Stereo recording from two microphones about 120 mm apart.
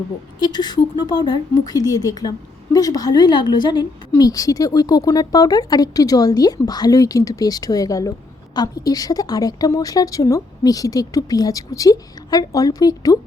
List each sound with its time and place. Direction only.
0.3 s a woman's voice: 35° left (ahead or behind)